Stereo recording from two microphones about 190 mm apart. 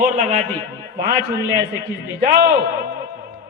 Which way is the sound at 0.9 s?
50° right (ahead or behind).